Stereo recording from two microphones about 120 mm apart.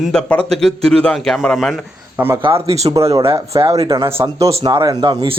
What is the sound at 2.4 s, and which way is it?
Speech, 55° right (ahead or behind).